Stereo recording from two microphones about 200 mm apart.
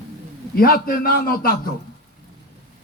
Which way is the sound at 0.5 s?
50° left (ahead or behind).